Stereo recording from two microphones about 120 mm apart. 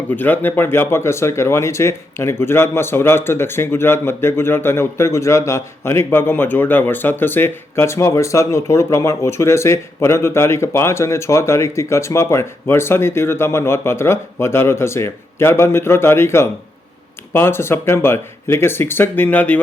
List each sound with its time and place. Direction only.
0.2 s speech: 15° left (ahead or behind)